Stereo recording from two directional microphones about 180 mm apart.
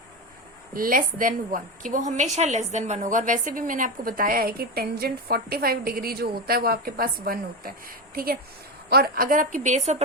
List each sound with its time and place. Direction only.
0.7 s a woman's voice: 50° right (ahead or behind)